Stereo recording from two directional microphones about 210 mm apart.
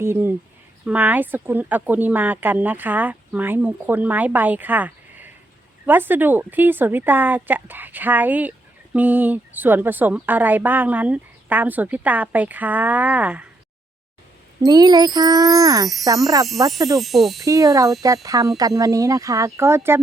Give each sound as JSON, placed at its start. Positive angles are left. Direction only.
{"t": 0.0, "sound": "speech", "side_deg": -10}
{"t": 14.6, "sound": "speech", "side_deg": -20}
{"t": 17.0, "sound": "wind chime", "side_deg": 0}
{"t": 17.4, "sound": "speech", "side_deg": -15}